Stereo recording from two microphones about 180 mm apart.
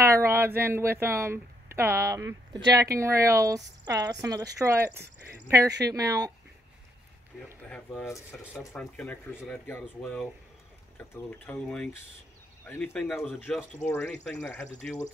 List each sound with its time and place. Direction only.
0.0 s speech: 15° right (ahead or behind)
7.3 s speech: centre (ahead or behind)